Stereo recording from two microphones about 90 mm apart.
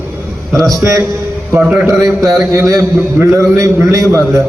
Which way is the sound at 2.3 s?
35° right (ahead or behind).